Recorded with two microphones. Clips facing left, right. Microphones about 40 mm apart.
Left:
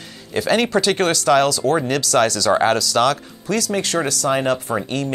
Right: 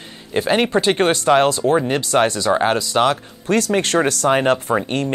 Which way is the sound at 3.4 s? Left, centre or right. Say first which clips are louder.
Right 4 dB; right.